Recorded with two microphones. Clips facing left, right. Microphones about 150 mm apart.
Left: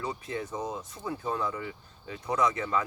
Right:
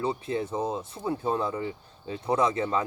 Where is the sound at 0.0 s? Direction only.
30° right (ahead or behind).